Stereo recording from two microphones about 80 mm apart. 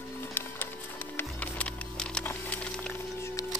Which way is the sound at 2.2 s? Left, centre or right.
Centre.